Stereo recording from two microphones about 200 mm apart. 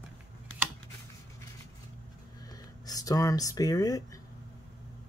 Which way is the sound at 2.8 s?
20° left (ahead or behind).